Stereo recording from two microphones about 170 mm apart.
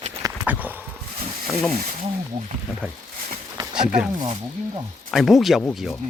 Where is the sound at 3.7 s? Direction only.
5° right (ahead or behind).